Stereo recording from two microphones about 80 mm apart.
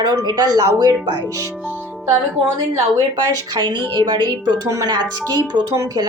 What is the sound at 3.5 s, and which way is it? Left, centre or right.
Speech, right.